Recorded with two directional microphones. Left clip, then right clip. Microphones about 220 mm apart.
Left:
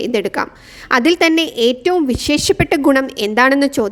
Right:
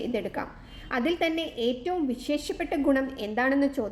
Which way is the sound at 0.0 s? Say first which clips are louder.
Left 13 dB; 50° left (ahead or behind).